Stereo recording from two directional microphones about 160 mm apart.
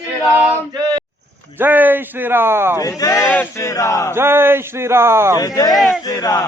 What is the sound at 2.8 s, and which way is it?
Speech, 20° left (ahead or behind).